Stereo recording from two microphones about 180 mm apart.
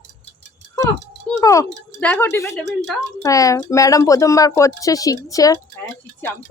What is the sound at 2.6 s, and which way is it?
Speech, 75° right (ahead or behind).